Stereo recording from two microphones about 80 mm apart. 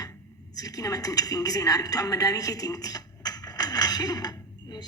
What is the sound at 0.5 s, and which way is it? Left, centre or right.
A woman's voice, left.